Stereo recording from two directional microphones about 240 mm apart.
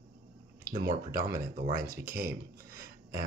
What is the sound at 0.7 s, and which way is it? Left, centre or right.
Speech, right.